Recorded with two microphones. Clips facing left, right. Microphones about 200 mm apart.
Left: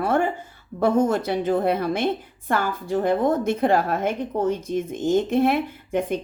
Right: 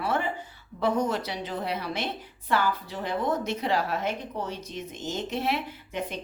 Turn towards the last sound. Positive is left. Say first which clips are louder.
# left 9 dB
turn(degrees=50)  # may be behind; listen again after turning